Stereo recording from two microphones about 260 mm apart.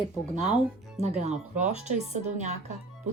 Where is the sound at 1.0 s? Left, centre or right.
Right.